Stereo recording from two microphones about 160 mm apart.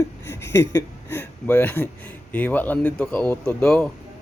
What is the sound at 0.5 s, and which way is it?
Speech, 15° left (ahead or behind).